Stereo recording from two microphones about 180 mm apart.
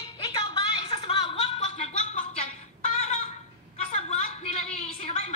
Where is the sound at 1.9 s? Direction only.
40° left (ahead or behind).